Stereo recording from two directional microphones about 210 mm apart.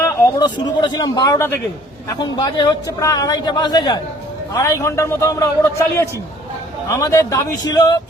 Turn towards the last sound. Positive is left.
turn(degrees=20)  # may be behind; listen again after turning